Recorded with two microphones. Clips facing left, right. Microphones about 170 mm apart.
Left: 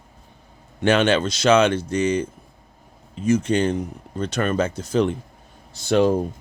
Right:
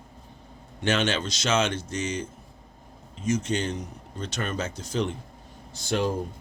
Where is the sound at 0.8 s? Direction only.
55° left (ahead or behind).